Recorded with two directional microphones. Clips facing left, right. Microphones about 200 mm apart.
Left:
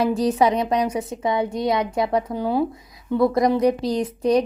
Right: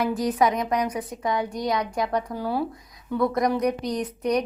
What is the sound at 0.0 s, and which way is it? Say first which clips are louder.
A woman's voice: left 4 dB; 30° left (ahead or behind).